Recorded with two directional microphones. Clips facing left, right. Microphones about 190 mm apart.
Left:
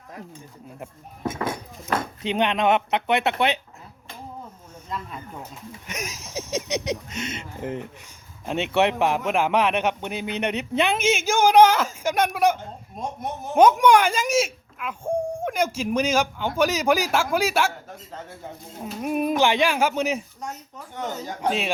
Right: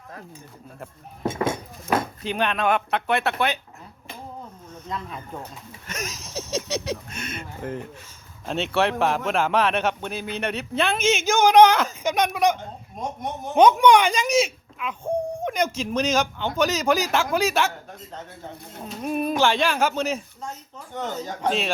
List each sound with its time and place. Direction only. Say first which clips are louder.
1.2 s speech: right 3 dB; 25° right (ahead or behind)
2.2 s speech: left 2 dB; 20° left (ahead or behind)
4.7 s a man's voice: right 1 dB; 5° left (ahead or behind)
18.9 s a man's voice: left 1 dB; 15° left (ahead or behind)